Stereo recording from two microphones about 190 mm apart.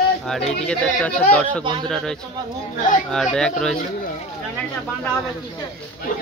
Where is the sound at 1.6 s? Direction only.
25° right (ahead or behind).